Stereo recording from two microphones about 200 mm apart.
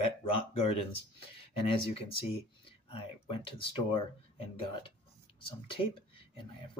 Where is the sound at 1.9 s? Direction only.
30° left (ahead or behind).